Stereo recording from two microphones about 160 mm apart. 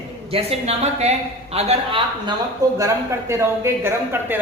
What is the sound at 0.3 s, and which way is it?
A woman's voice, 40° right (ahead or behind).